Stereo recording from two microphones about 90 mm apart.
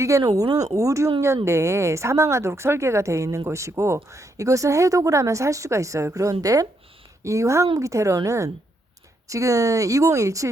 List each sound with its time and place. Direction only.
0.0 s speech: 40° right (ahead or behind)